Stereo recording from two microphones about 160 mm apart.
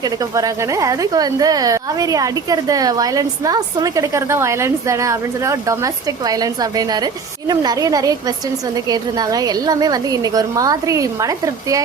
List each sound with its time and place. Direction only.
0.0 s speech: 20° right (ahead or behind)